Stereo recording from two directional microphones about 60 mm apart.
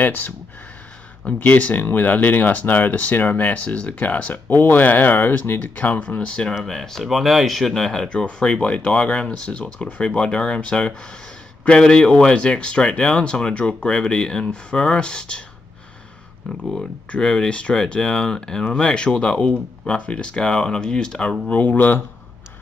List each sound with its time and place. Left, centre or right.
0.0 s speech: left; by 6.5 s centre
6.5 s speech: centre
16.7 s speech: centre; by 22.0 s left